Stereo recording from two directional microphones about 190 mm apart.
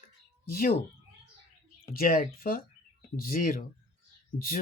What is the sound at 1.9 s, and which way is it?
Speech, 50° left (ahead or behind).